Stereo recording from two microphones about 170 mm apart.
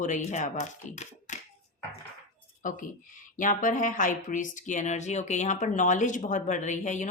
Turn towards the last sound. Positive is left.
turn(degrees=45)  # may be behind; listen again after turning